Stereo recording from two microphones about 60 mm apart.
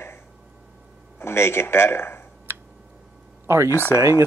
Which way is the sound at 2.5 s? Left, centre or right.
Right.